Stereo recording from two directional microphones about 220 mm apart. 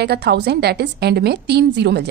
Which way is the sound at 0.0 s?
50° right (ahead or behind).